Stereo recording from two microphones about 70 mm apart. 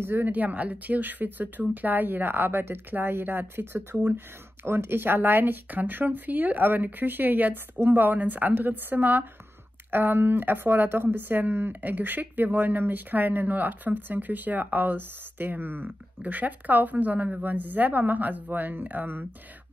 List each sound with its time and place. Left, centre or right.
0.0 s speech: right